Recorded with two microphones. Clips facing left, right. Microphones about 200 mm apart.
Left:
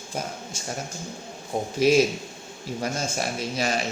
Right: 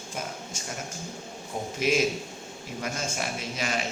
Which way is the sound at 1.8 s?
35° left (ahead or behind).